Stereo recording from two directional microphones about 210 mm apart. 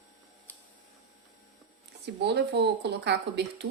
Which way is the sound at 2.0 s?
55° right (ahead or behind).